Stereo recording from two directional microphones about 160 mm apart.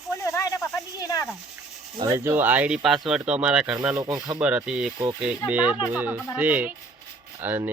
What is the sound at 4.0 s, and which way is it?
Speech, 25° right (ahead or behind).